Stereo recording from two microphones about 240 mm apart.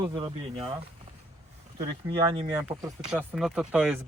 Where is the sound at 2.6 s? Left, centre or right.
Centre.